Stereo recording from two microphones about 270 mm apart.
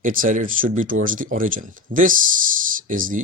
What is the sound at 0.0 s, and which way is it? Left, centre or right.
Speech, right.